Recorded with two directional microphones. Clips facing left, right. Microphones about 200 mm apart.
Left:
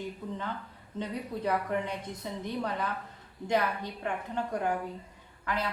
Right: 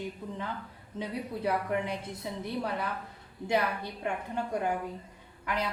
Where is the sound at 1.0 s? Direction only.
10° right (ahead or behind).